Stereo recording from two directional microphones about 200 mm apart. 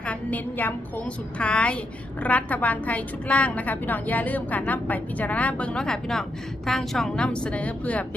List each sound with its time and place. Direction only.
0.0 s a woman's voice: 5° left (ahead or behind)